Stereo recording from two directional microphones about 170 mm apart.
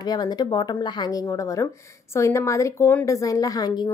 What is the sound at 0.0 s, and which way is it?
Speech, 25° left (ahead or behind).